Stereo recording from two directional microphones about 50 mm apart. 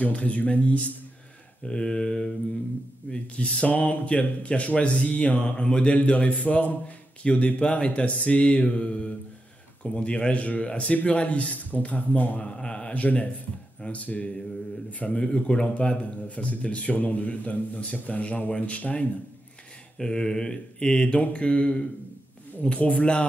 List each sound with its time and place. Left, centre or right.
0.0 s speech: left
1.6 s mantra: centre
3.1 s speech: left
12.4 s speech: centre
20.0 s speech: centre